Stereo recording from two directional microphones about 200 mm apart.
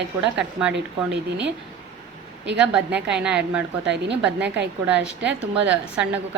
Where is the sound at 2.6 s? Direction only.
5° right (ahead or behind).